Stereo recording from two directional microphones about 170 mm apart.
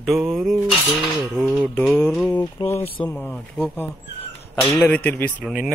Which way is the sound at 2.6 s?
25° left (ahead or behind).